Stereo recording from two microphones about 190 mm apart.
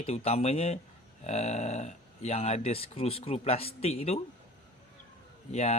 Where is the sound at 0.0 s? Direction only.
30° left (ahead or behind).